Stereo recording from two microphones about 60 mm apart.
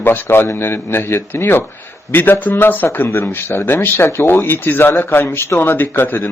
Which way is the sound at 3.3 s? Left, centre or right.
Left.